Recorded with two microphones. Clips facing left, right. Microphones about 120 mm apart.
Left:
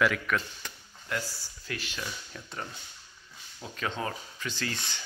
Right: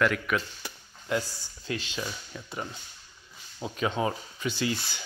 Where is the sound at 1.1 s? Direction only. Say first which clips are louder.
Right 5 dB; 20° right (ahead or behind).